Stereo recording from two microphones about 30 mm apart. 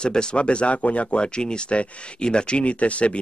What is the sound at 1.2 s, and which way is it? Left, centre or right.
Speech, left.